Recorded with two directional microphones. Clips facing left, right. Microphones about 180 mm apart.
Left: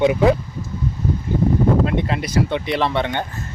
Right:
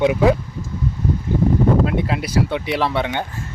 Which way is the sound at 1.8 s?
5° right (ahead or behind).